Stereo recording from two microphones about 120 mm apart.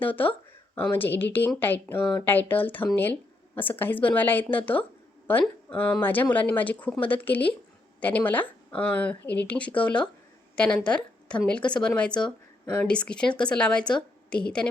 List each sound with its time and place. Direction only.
0.0 s a woman's voice: 15° left (ahead or behind)